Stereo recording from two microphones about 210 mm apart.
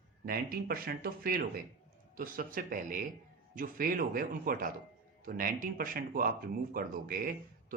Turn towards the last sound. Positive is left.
turn(degrees=-40)  # may be behind; listen again after turning